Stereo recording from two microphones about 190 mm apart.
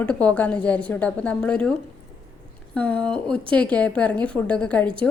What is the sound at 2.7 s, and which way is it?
Speech, 5° left (ahead or behind).